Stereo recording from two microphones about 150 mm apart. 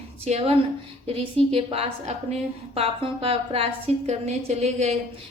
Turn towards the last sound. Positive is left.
turn(degrees=-45)  # may be behind; listen again after turning